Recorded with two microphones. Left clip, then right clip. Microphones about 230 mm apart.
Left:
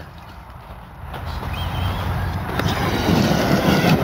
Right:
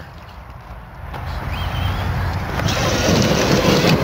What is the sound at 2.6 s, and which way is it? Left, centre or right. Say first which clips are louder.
Vehicle: right 4 dB; right.